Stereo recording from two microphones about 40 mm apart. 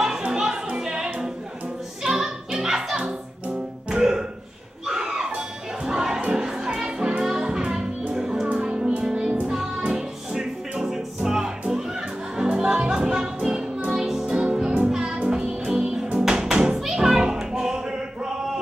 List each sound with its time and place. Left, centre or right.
0.0 s music: centre
4.8 s a sound: centre
5.9 s music: centre
14.3 s music: right